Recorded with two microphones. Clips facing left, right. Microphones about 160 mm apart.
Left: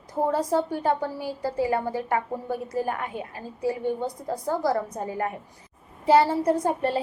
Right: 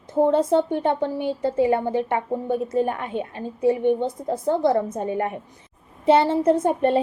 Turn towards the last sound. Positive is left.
turn(degrees=-25)  # may be behind; listen again after turning